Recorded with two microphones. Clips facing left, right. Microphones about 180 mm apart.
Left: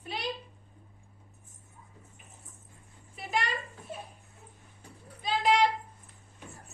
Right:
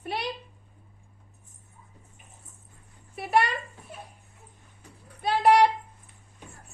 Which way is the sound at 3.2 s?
65° right (ahead or behind).